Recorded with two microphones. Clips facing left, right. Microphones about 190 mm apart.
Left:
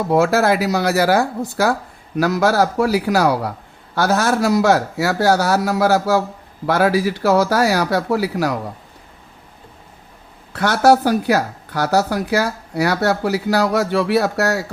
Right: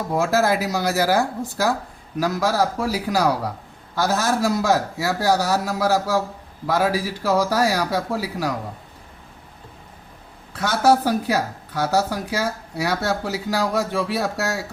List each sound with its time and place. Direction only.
0.1 s speech: 70° left (ahead or behind)
10.5 s speech: 70° left (ahead or behind)